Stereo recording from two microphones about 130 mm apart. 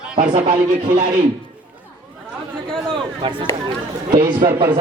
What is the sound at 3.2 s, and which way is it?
A man's voice, 40° right (ahead or behind).